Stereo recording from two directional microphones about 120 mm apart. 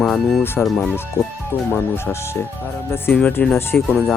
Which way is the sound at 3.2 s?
10° left (ahead or behind).